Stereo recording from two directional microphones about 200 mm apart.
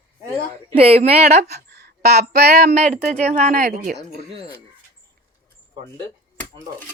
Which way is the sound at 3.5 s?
50° right (ahead or behind).